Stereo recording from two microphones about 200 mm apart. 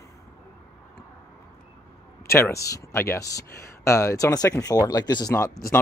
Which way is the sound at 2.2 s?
15° left (ahead or behind).